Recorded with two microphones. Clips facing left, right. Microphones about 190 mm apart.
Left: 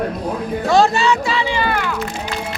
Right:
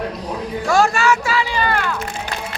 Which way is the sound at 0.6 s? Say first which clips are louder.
Left 2 dB; 20° left (ahead or behind).